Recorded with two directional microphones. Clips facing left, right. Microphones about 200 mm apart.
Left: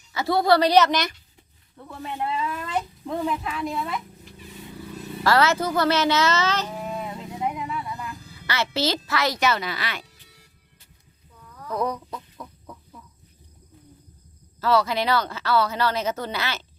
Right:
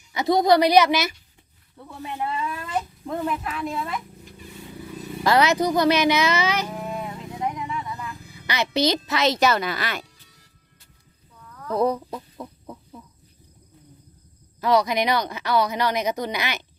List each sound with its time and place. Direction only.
0.1 s a woman's voice: 20° right (ahead or behind); by 4.0 s centre (ahead or behind)
5.2 s a woman's voice: 15° right (ahead or behind)
7.4 s a sound: 5° left (ahead or behind)
8.3 s a child's voice: 15° right (ahead or behind)
9.4 s a woman's voice: 45° right (ahead or behind)
11.7 s chicken: 30° right (ahead or behind)
14.6 s a woman's voice: 15° right (ahead or behind)